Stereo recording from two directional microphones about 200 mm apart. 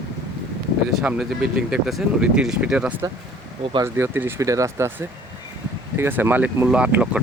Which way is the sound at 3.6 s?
25° right (ahead or behind).